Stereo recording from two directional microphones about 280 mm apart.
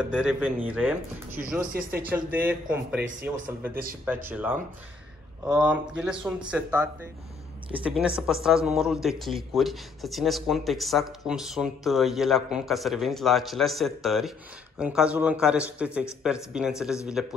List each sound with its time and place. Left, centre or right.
0.0 s a man's voice: centre
1.7 s speech: right
2.3 s a man's voice: centre